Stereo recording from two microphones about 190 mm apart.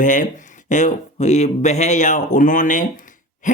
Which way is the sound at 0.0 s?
40° left (ahead or behind).